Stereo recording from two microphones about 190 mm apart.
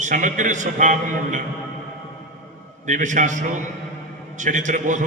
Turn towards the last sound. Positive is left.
turn(degrees=-40)  # may be behind; listen again after turning